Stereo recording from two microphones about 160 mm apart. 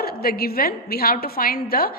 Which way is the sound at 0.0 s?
70° left (ahead or behind).